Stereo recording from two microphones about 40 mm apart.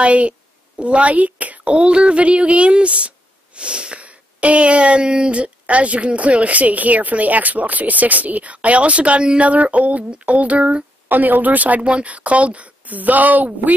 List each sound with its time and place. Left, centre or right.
0.0 s a child's voice: right
4.0 s speech: right
11.1 s speech: right